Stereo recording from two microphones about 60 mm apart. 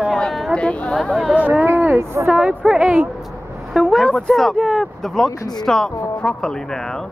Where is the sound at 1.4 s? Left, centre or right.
Right.